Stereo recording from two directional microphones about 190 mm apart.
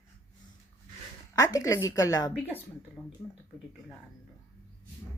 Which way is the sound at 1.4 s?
15° left (ahead or behind).